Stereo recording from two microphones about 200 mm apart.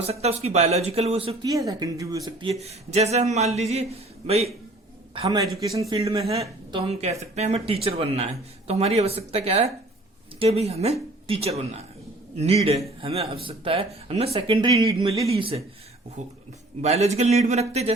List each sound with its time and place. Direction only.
0.0 s a man's voice: 30° right (ahead or behind)